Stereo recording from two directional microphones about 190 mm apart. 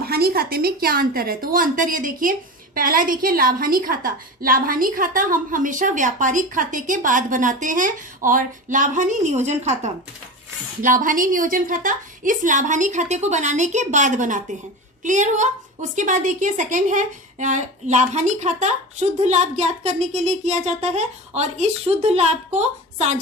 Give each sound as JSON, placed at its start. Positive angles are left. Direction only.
{"t": 0.0, "sound": "a woman's voice", "side_deg": -55}